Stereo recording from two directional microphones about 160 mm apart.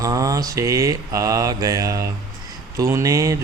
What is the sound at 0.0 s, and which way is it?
Speech, 20° right (ahead or behind).